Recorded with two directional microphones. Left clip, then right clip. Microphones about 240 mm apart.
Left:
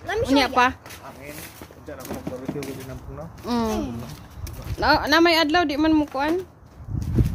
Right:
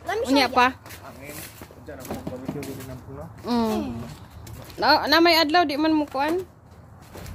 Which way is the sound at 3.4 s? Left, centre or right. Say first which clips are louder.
Even; centre.